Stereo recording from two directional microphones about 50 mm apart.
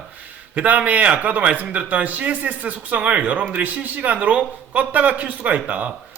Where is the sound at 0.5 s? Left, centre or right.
Right.